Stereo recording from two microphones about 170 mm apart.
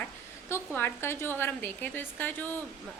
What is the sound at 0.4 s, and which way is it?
A woman's voice, 15° left (ahead or behind).